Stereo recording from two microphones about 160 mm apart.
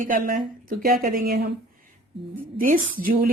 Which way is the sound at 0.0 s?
60° right (ahead or behind).